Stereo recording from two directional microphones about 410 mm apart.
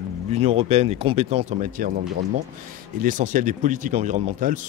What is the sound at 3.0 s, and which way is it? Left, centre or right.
Speech, centre.